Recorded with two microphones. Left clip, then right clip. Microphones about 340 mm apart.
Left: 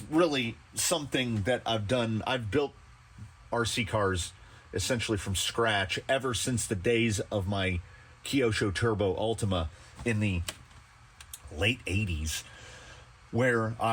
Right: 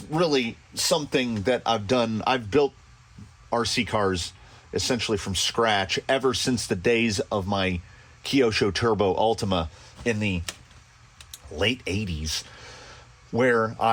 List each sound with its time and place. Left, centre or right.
0.1 s speech: right